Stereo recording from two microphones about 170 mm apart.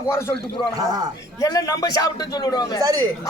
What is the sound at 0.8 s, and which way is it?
Speech, 20° right (ahead or behind).